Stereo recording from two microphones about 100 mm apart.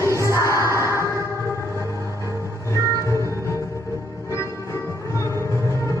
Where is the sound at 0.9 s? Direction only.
30° left (ahead or behind).